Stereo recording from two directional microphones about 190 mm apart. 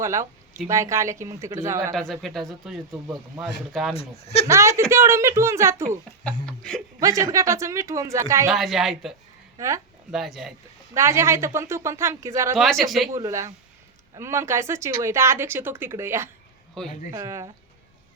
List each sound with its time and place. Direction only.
0.0 s a woman's voice: 15° right (ahead or behind)
1.9 s speech: centre (ahead or behind)
3.9 s speech: 35° left (ahead or behind)
4.4 s a woman's voice: 15° right (ahead or behind)
6.4 s speech: 5° left (ahead or behind)
7.0 s a woman's voice: 15° right (ahead or behind)
8.4 s speech: centre (ahead or behind)
9.6 s speech: 15° right (ahead or behind)
10.1 s speech: centre (ahead or behind)
10.9 s a woman's voice: 15° right (ahead or behind)
12.5 s speech: centre (ahead or behind)
13.1 s a woman's voice: 15° right (ahead or behind)
16.8 s speech: 5° left (ahead or behind)
17.1 s a woman's voice: 15° right (ahead or behind)